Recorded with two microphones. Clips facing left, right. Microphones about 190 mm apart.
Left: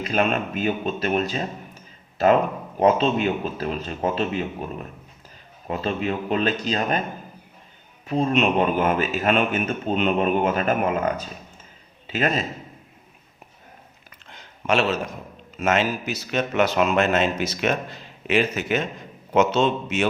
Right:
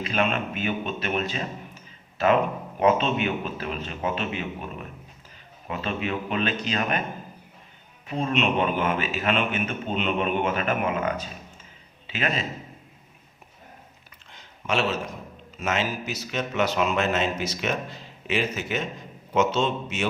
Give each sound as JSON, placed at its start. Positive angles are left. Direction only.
{"t": 0.0, "sound": "a man's voice", "side_deg": 40}
{"t": 2.7, "sound": "a man's voice", "side_deg": 35}
{"t": 8.1, "sound": "a man's voice", "side_deg": 40}
{"t": 15.6, "sound": "a man's voice", "side_deg": 60}